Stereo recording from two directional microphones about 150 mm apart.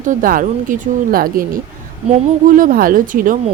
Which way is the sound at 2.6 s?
70° right (ahead or behind).